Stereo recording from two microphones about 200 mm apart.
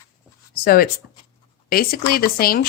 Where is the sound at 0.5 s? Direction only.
50° left (ahead or behind).